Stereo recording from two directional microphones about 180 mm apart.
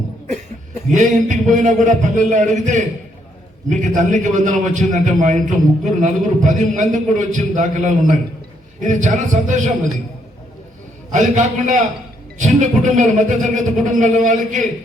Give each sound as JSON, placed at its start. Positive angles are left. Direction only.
{"t": 0.9, "sound": "a man's voice", "side_deg": -45}
{"t": 11.1, "sound": "a man's voice", "side_deg": -45}